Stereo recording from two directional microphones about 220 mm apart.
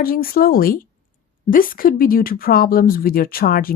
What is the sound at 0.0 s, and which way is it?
Speech, 40° left (ahead or behind).